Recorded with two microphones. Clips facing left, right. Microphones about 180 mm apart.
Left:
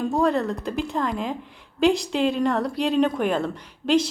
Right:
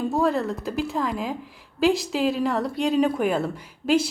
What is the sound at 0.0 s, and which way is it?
A woman's voice, centre (ahead or behind).